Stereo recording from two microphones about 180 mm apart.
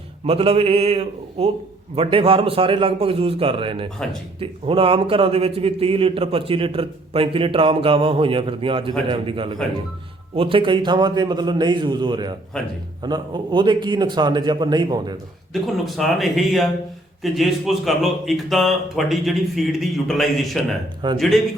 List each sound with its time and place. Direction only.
0.3 s a man's voice: 35° right (ahead or behind)
15.6 s a man's voice: centre (ahead or behind)
21.0 s a man's voice: 25° right (ahead or behind)